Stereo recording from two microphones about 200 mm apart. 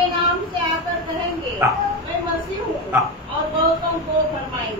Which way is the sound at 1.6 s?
10° right (ahead or behind).